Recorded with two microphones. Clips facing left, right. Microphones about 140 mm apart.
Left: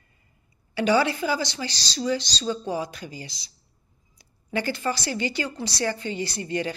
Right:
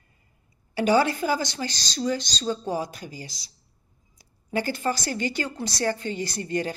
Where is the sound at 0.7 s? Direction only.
45° right (ahead or behind).